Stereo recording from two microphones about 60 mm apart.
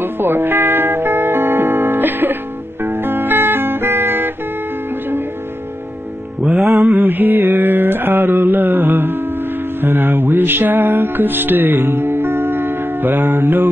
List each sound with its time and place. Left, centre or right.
0.0 s music: right
6.7 s mantra: right
9.8 s music: right